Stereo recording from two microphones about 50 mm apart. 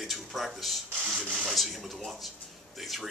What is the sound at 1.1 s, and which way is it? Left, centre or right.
Speech, right.